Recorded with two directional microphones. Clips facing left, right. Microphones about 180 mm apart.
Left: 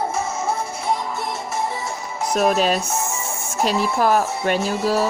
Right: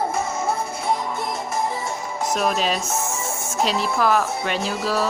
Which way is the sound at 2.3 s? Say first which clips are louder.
Left 5 dB; 45° left (ahead or behind).